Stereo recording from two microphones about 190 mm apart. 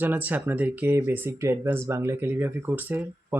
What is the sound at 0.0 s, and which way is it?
Speech, 10° right (ahead or behind).